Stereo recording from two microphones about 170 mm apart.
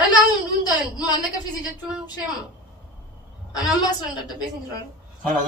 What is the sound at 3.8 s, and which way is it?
A woman's voice, 25° left (ahead or behind).